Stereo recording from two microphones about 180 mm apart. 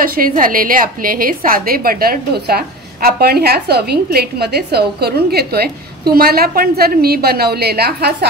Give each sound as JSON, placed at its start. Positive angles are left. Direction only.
{"t": 0.0, "sound": "a woman's voice", "side_deg": -50}